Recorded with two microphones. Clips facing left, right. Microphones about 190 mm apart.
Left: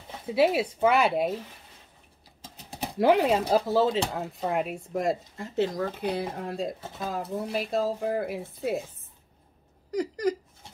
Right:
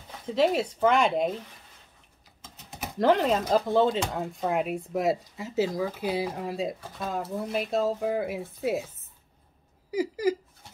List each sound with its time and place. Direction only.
0.3 s speech: 10° left (ahead or behind)
2.4 s typing: 35° left (ahead or behind)
3.0 s speech: 10° left (ahead or behind)
9.8 s speech: 5° right (ahead or behind)